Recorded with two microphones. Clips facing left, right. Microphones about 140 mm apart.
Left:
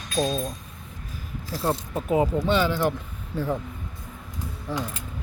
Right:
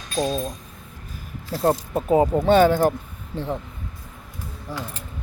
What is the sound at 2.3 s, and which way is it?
Speech, 50° right (ahead or behind).